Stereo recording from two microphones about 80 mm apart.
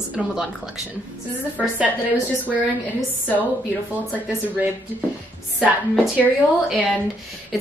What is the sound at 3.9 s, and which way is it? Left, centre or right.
Speech, centre.